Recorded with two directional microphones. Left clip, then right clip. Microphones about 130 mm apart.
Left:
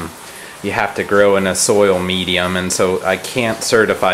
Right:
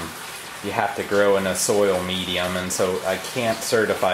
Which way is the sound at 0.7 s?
30° left (ahead or behind).